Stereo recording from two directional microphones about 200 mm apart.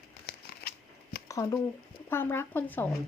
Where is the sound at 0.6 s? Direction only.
50° left (ahead or behind).